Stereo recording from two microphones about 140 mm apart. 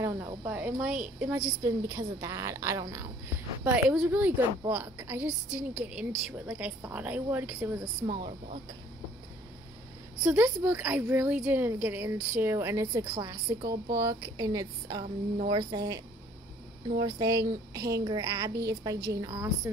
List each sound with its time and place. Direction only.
0.0 s cricket: 15° right (ahead or behind)
0.4 s a woman's voice: 10° right (ahead or behind)
1.2 s a woman's voice: 20° right (ahead or behind)
3.9 s a woman's voice: 10° right (ahead or behind)
7.8 s speech: 30° right (ahead or behind)
10.2 s a woman's voice: 10° right (ahead or behind)
13.0 s speech: 35° right (ahead or behind)
13.6 s a woman's voice: 25° right (ahead or behind)
17.0 s a woman's voice: 25° right (ahead or behind)